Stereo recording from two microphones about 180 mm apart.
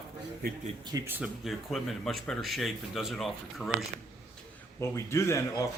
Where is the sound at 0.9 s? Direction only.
10° right (ahead or behind).